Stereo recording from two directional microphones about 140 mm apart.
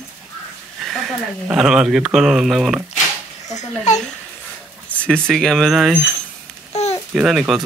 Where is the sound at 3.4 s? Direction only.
55° left (ahead or behind).